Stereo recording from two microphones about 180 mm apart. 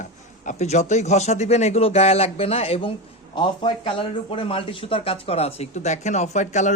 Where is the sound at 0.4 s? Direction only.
40° left (ahead or behind).